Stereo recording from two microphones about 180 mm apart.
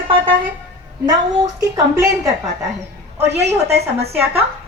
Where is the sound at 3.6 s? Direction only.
65° right (ahead or behind).